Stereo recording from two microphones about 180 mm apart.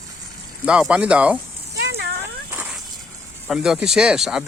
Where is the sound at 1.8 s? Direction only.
70° right (ahead or behind).